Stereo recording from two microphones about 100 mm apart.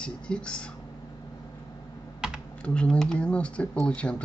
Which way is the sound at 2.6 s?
10° left (ahead or behind).